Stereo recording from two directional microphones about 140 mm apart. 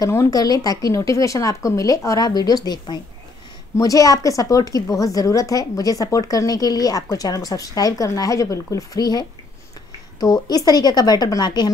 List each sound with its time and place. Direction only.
0.0 s a woman's voice: 25° left (ahead or behind)
10.2 s a woman's voice: 25° left (ahead or behind)